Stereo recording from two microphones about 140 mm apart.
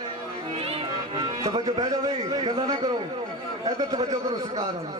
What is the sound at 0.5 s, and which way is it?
A man's voice, 45° right (ahead or behind).